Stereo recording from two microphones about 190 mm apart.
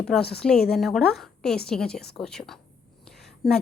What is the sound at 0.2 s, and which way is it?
Speech, 55° left (ahead or behind).